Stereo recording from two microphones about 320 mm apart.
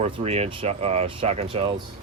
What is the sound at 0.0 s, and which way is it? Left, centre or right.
Speech, centre.